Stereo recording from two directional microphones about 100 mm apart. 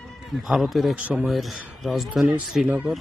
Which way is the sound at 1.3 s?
Centre (ahead or behind).